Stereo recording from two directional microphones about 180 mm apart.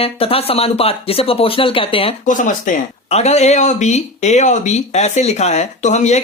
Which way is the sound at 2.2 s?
45° left (ahead or behind).